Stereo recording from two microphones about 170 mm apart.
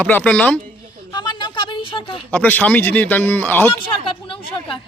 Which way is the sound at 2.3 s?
10° left (ahead or behind).